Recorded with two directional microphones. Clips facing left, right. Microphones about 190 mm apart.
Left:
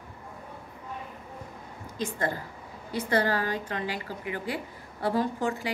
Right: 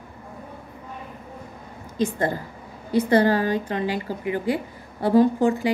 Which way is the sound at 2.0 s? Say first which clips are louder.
Right 7 dB; 25° right (ahead or behind).